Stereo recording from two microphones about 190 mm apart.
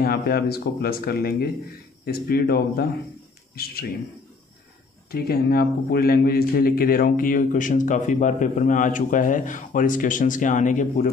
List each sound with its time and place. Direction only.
0.0 s speech: 55° left (ahead or behind)
5.1 s speech: 55° left (ahead or behind)